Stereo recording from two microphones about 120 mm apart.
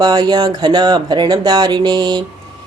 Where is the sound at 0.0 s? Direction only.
35° right (ahead or behind).